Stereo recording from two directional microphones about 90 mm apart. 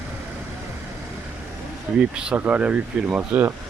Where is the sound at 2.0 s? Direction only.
10° right (ahead or behind).